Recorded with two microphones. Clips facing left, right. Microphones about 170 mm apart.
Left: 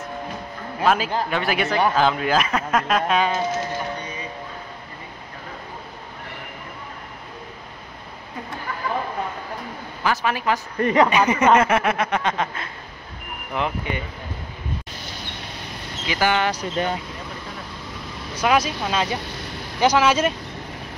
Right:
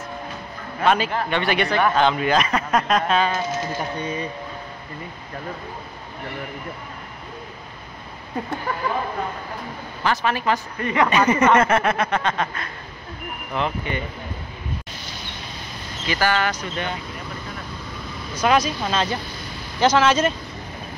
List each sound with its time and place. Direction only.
0.7 s a man's voice: centre (ahead or behind)
10.0 s speech: 10° left (ahead or behind)
10.8 s speech: 40° left (ahead or behind)
11.1 s speech: 10° left (ahead or behind)
16.1 s speech: 20° left (ahead or behind)
16.5 s speech: 40° left (ahead or behind)
18.4 s speech: 5° left (ahead or behind)